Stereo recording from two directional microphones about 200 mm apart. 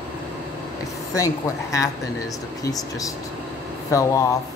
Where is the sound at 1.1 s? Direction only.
15° left (ahead or behind).